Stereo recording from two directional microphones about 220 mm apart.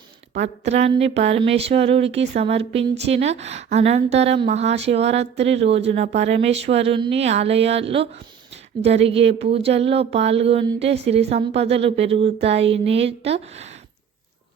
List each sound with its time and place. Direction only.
0.3 s speech: 30° right (ahead or behind)